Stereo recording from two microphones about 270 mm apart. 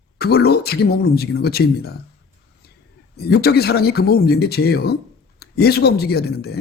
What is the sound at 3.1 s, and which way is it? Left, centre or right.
Speech, left.